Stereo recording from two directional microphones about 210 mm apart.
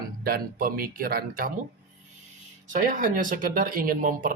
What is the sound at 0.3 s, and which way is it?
Speech, 45° right (ahead or behind).